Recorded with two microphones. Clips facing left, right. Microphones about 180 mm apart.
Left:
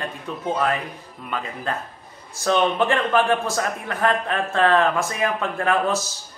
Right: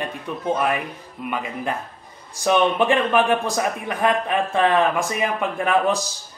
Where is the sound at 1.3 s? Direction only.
15° right (ahead or behind).